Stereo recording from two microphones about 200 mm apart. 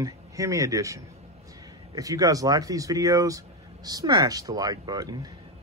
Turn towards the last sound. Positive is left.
turn(degrees=-20)  # may be behind; listen again after turning